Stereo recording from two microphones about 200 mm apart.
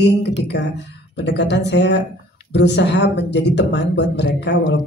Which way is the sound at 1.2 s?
60° left (ahead or behind).